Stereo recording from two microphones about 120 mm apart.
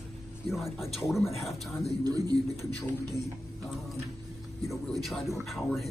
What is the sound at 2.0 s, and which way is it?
Speech, 35° right (ahead or behind).